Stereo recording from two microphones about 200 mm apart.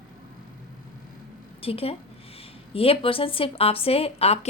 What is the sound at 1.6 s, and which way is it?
A woman's voice, 30° left (ahead or behind).